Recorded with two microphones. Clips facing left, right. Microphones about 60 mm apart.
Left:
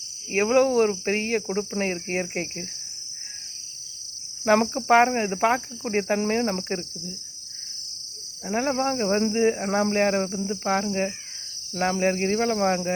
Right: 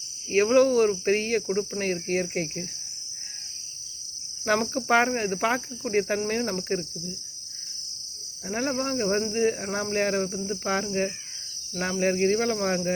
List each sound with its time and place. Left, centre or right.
0.3 s cricket: centre
1.8 s speech: left
4.4 s cricket: left
6.2 s speech: left
8.4 s cricket: left
9.3 s speech: left
9.9 s cricket: left
11.8 s speech: left
12.1 s cricket: left